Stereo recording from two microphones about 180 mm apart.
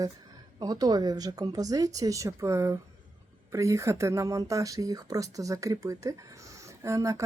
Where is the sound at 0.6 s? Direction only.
20° right (ahead or behind).